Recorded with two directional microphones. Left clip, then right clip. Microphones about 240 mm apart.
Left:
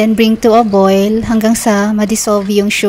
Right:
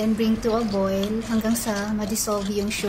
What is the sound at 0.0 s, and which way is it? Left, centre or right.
Speech, left.